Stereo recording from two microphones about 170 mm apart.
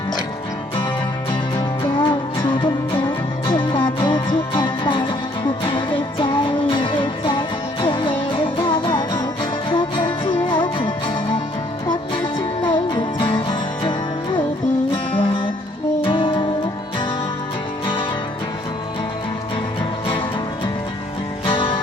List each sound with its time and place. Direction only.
1.8 s music: 30° left (ahead or behind)
6.1 s music: 30° left (ahead or behind)
12.1 s music: 25° left (ahead or behind)
15.1 s music: 30° left (ahead or behind)
21.4 s music: 30° left (ahead or behind)